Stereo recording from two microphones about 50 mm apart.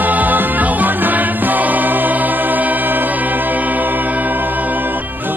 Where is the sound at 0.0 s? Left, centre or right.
Right.